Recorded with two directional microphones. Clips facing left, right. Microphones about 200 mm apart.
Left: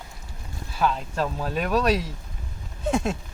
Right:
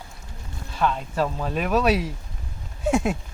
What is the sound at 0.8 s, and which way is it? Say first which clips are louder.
Speech: right 1 dB; centre (ahead or behind).